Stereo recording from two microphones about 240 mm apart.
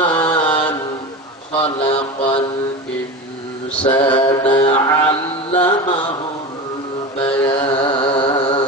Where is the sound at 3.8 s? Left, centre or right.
Centre.